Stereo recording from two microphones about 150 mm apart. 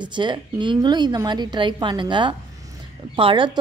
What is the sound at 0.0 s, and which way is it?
A woman's voice, 30° right (ahead or behind).